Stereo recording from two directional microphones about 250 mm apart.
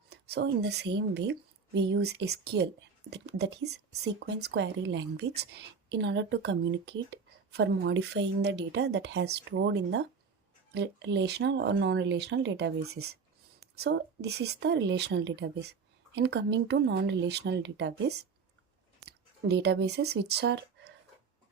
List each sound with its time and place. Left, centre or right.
0.1 s a woman's voice: right